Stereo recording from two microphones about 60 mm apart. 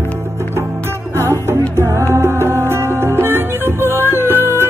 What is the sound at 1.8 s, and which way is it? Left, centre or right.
Music, right.